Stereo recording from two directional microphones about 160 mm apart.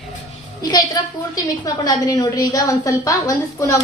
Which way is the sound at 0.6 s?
25° left (ahead or behind).